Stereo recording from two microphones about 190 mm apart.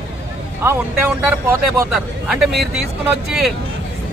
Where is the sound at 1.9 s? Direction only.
5° right (ahead or behind).